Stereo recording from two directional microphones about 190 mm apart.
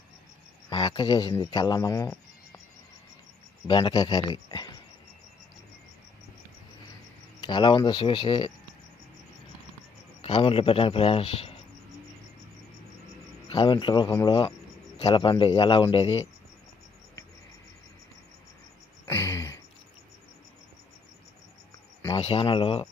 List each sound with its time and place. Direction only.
0.7 s speech: 25° left (ahead or behind)
3.7 s a man's voice: 25° left (ahead or behind)
7.4 s a man's voice: 25° left (ahead or behind)
10.2 s a man's voice: 30° left (ahead or behind)
13.5 s a man's voice: 25° left (ahead or behind)
19.0 s a sound: 15° left (ahead or behind)
22.1 s speech: 30° left (ahead or behind)